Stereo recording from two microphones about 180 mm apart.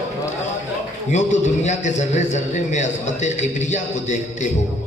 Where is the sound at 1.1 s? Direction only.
40° left (ahead or behind).